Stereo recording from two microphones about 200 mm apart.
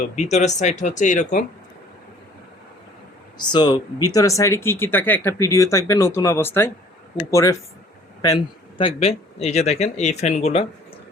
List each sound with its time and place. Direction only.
0.2 s speech: 35° left (ahead or behind)
3.3 s speech: 20° left (ahead or behind)
8.8 s speech: 30° left (ahead or behind)